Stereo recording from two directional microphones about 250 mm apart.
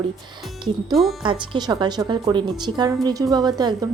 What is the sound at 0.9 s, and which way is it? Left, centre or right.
Speech, centre.